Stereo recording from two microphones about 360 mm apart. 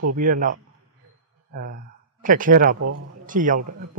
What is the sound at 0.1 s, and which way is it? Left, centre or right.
A man's voice, right.